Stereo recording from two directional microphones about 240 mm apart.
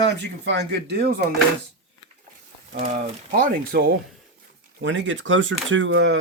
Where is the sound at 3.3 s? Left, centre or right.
Right.